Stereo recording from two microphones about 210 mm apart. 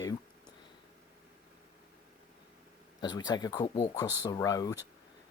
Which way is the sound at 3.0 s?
20° left (ahead or behind).